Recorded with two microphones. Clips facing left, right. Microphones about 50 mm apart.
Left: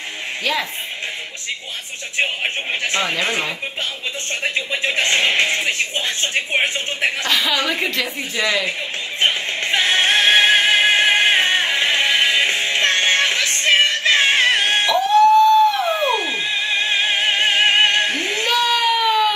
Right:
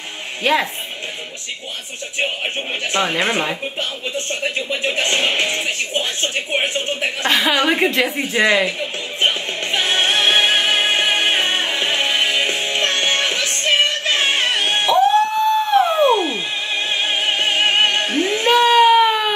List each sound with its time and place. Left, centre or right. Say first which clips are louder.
0.4 s speech: right 5 dB; right
2.9 s a woman's voice: right 4 dB; right
4.3 s speech: left 2 dB; left
7.2 s a woman's voice: right 6 dB; right
9.2 s music: even; left
15.3 s a sound: left 3 dB; right
16.3 s music: left 2 dB; left
18.4 s baby cry: right 7 dB; right